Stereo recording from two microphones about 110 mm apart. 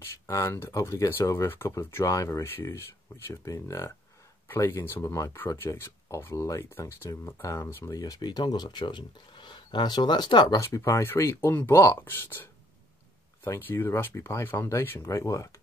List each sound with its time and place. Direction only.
0.0 s speech: 25° left (ahead or behind); by 10.6 s 45° left (ahead or behind)
10.6 s speech: 30° left (ahead or behind)